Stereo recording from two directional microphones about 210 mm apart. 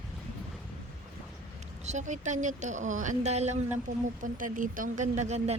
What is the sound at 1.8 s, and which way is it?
A woman's voice, 35° right (ahead or behind).